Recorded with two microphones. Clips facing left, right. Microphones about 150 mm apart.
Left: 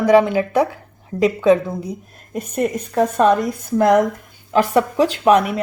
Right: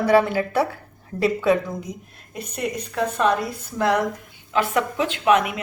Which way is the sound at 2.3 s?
45° left (ahead or behind).